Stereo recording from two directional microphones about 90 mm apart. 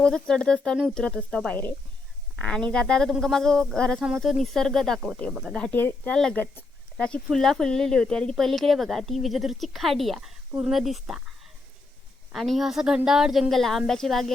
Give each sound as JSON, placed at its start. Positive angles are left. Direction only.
{"t": 0.0, "sound": "speech", "side_deg": 10}
{"t": 5.3, "sound": "speech", "side_deg": -5}
{"t": 5.7, "sound": "speech", "side_deg": 20}
{"t": 7.0, "sound": "speech", "side_deg": 5}
{"t": 12.3, "sound": "speech", "side_deg": 0}